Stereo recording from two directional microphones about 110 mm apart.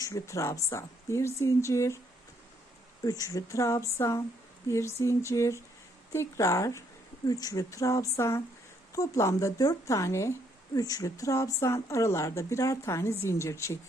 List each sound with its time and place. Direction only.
0.0 s speech: 30° left (ahead or behind)
3.0 s speech: 35° left (ahead or behind)